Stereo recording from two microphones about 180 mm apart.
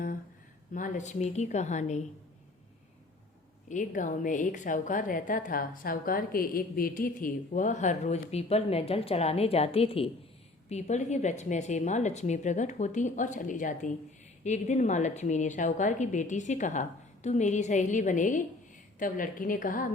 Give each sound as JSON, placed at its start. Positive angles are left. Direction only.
{"t": 0.7, "sound": "a woman's voice", "side_deg": 45}
{"t": 3.7, "sound": "a woman's voice", "side_deg": 45}